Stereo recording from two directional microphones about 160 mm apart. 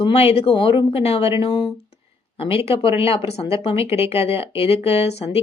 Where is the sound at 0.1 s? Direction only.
40° left (ahead or behind).